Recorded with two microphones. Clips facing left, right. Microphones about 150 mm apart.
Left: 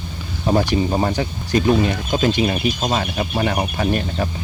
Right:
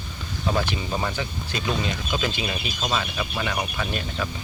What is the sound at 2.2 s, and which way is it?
Speech, 40° left (ahead or behind).